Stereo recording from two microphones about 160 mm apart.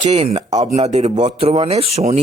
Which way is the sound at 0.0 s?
40° right (ahead or behind).